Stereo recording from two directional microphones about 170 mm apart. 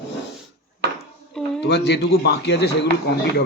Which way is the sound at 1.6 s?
75° left (ahead or behind).